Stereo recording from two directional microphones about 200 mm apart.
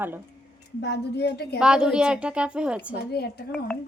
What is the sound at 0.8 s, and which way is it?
Speech, 55° left (ahead or behind).